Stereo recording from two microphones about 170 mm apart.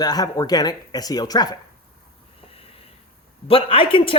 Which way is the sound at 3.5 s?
35° left (ahead or behind).